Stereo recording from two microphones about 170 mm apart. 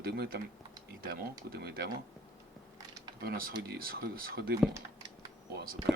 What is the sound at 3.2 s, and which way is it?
Speech, 65° right (ahead or behind).